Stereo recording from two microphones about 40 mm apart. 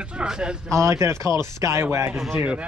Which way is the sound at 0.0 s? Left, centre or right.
Right.